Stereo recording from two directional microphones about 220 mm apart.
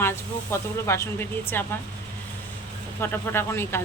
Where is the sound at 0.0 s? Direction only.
10° left (ahead or behind).